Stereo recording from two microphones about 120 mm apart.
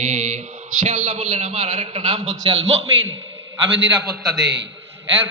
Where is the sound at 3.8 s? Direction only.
5° right (ahead or behind).